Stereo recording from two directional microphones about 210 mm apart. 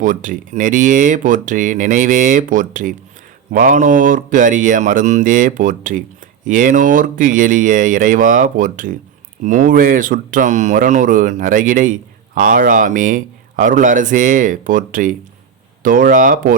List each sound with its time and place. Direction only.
0.0 s speech: 40° right (ahead or behind)